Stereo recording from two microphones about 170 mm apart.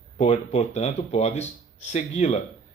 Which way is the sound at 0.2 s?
40° left (ahead or behind).